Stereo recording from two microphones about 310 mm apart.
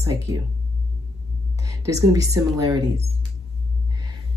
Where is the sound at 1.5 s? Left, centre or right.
Centre.